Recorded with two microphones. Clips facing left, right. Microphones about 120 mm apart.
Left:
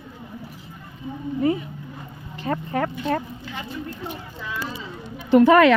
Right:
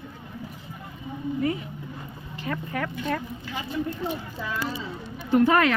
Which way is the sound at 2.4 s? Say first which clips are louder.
Left 6 dB; 35° left (ahead or behind).